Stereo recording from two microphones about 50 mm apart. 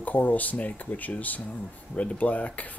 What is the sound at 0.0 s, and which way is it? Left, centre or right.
Speech, left.